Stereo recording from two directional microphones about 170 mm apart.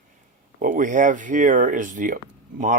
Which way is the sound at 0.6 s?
50° right (ahead or behind).